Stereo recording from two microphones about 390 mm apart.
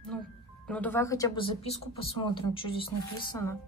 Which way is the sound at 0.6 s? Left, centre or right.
Centre.